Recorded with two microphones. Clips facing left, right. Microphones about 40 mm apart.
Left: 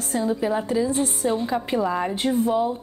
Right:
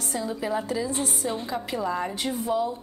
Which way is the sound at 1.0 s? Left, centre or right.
Left.